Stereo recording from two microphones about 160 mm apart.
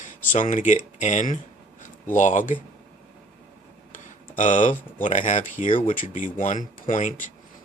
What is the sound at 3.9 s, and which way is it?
Speech, 55° left (ahead or behind).